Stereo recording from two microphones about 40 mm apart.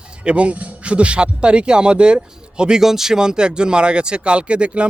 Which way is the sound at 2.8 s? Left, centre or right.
Centre.